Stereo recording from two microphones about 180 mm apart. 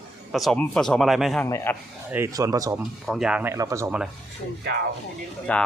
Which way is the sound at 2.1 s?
15° right (ahead or behind).